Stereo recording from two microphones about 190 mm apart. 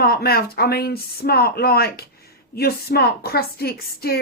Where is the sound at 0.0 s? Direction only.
55° left (ahead or behind).